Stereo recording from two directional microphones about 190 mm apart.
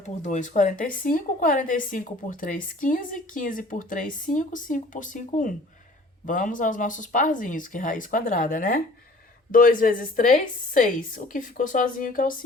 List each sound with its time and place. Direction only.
0.0 s speech: 40° left (ahead or behind)